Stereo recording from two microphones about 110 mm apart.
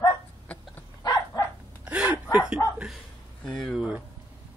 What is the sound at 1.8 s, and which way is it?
Gasp, 10° right (ahead or behind).